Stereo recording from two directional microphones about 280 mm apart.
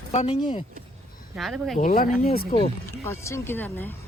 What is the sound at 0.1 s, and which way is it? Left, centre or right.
Speech, left.